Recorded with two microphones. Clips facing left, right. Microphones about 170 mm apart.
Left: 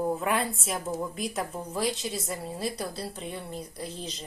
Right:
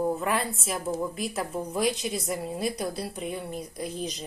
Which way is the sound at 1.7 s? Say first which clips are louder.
Right 3 dB; 15° right (ahead or behind).